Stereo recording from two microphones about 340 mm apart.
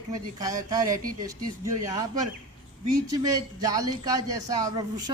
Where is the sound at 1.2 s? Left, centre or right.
Centre.